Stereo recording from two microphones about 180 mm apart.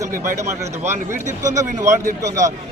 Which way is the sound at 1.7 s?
15° right (ahead or behind).